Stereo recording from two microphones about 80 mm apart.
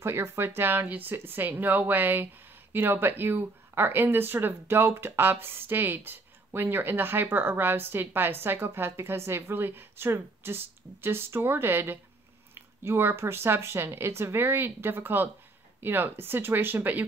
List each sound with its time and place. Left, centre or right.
0.0 s speech: right